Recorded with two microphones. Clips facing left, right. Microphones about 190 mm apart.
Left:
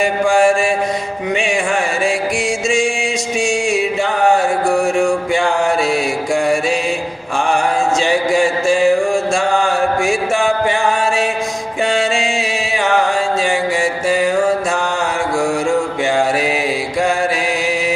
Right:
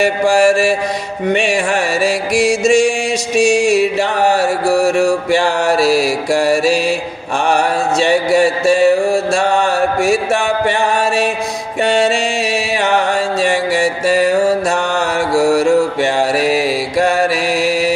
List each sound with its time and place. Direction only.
0.0 s mantra: 70° right (ahead or behind)
2.3 s mantra: 70° right (ahead or behind)
2.7 s music: 70° right (ahead or behind)
4.6 s mantra: 40° right (ahead or behind)
5.4 s mantra: 70° right (ahead or behind)
7.5 s mantra: 65° right (ahead or behind)
10.3 s mantra: 65° right (ahead or behind)
11.8 s music: 65° right (ahead or behind)
14.2 s mantra: 70° right (ahead or behind)